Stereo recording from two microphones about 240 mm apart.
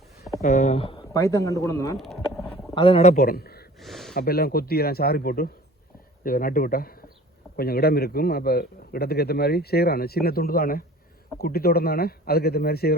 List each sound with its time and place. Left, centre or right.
0.4 s speech: left; by 2.0 s centre
2.0 s a sound: centre
2.7 s a man's voice: left
3.8 s gasp: centre
4.1 s a man's voice: left